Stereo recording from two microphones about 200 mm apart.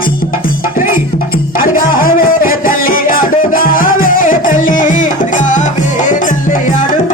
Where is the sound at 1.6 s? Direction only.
45° left (ahead or behind).